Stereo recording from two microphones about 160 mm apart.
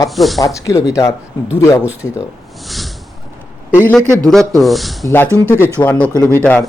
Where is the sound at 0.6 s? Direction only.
20° left (ahead or behind).